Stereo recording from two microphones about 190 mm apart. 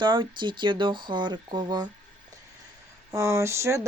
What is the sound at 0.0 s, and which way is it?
Speech, 25° right (ahead or behind).